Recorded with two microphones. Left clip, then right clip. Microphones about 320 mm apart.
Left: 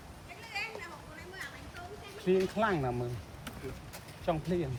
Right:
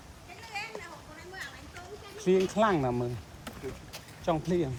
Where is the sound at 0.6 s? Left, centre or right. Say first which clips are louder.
Even; right.